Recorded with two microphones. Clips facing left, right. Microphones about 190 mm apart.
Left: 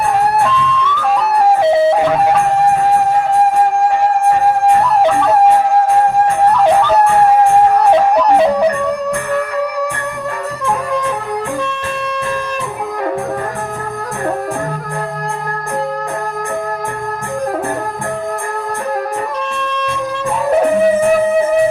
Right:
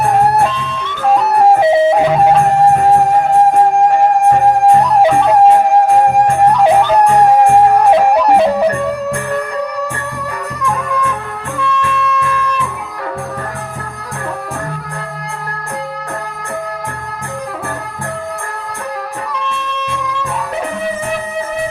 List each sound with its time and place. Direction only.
8.1 s music: 10° right (ahead or behind)
11.8 s music: 35° left (ahead or behind)
19.3 s wind instrument: 50° left (ahead or behind)
20.8 s music: 50° left (ahead or behind)